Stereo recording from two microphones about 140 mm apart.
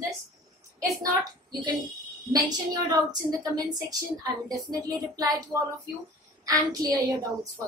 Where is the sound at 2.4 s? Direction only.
30° right (ahead or behind).